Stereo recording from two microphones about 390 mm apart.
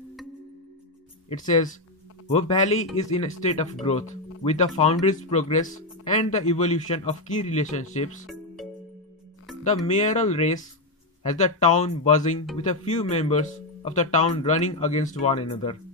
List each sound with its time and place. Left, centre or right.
1.3 s speech: centre
9.8 s speech: centre